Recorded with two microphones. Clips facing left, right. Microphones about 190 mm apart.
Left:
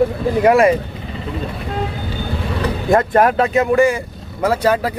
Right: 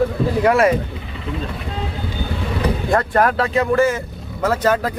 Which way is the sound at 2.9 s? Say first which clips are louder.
Left 5 dB; 20° left (ahead or behind).